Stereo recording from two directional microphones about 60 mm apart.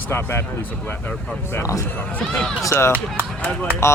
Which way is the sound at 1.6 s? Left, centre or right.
Left.